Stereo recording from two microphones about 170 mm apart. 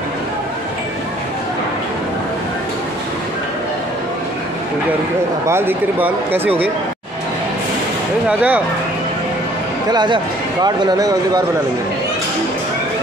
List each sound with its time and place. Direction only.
5.5 s speech: 15° right (ahead or behind)
8.3 s speech: 10° right (ahead or behind)
9.8 s speech: 25° right (ahead or behind)